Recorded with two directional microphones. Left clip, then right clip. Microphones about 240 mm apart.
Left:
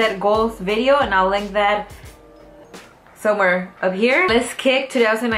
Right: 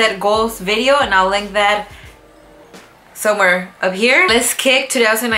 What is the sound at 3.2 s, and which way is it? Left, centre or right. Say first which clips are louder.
A woman's voice: right 3 dB; centre.